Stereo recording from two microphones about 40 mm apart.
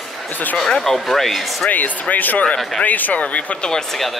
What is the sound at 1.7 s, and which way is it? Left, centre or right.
Speech, left.